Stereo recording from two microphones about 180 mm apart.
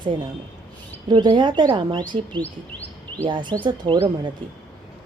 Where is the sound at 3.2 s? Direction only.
25° right (ahead or behind).